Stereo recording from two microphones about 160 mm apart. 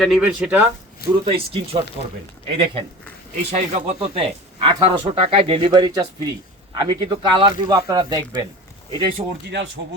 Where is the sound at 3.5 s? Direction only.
45° right (ahead or behind).